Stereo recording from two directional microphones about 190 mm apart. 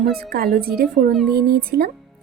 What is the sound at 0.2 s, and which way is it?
A woman's voice, 55° right (ahead or behind).